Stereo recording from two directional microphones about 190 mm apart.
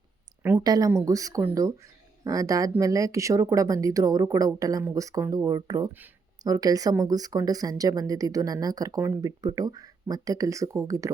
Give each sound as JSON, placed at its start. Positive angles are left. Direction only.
{"t": 0.4, "sound": "speech", "side_deg": -15}